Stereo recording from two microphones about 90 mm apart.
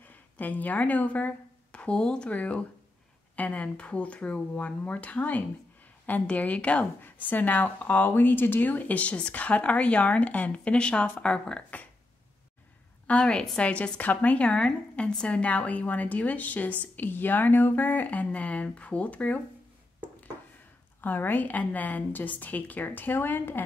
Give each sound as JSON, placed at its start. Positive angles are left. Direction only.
{"t": 0.4, "sound": "a woman's voice", "side_deg": 20}
{"t": 13.0, "sound": "a woman's voice", "side_deg": 10}
{"t": 21.0, "sound": "a woman's voice", "side_deg": 20}